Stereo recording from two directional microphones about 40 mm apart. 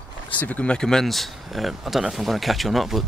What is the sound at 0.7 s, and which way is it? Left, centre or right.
Speech, centre.